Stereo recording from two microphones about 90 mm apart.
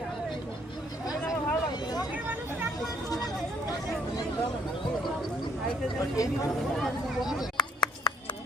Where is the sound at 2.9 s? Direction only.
45° left (ahead or behind).